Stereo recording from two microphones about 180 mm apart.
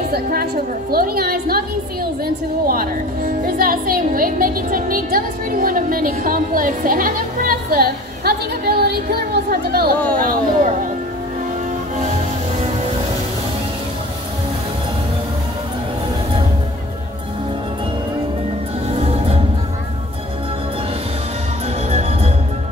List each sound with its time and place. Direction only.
0.1 s a woman's voice: 55° right (ahead or behind)
18.9 s music: 35° right (ahead or behind)